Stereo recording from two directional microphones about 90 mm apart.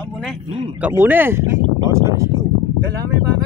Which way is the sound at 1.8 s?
35° right (ahead or behind).